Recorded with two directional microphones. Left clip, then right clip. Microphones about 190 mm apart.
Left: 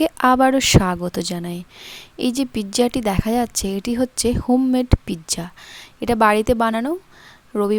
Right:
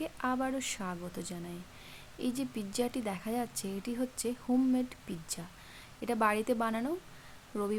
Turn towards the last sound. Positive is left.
turn(degrees=45)  # may be behind; listen again after turning